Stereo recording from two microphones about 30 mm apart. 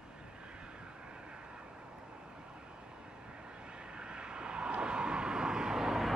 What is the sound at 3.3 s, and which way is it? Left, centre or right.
Vehicle, right.